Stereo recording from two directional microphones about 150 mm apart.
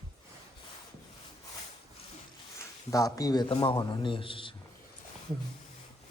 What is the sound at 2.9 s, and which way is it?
A man's voice, 25° left (ahead or behind).